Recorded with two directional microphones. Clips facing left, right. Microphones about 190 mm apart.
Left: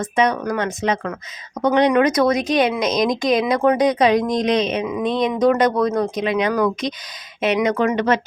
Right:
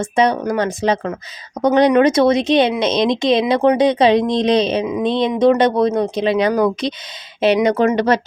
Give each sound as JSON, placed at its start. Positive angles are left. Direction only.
{"t": 0.0, "sound": "speech", "side_deg": -30}